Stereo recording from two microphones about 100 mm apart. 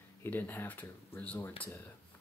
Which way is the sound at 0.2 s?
20° left (ahead or behind).